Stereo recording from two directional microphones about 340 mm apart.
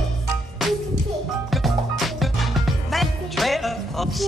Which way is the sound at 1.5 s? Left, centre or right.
Centre.